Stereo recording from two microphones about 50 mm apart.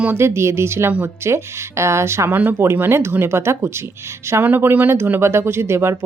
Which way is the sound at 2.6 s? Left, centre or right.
Right.